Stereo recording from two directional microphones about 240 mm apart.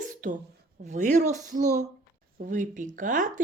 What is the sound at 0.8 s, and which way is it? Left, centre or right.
Speech, right.